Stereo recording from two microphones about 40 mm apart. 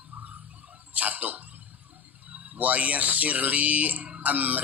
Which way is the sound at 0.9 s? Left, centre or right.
Right.